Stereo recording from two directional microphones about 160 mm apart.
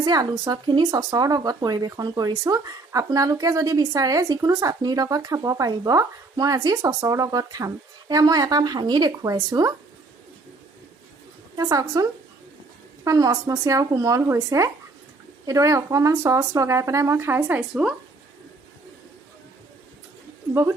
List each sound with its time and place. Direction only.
0.0 s speech: 25° right (ahead or behind)
11.5 s speech: 25° right (ahead or behind)
13.1 s speech: 20° right (ahead or behind)
20.5 s speech: 15° right (ahead or behind)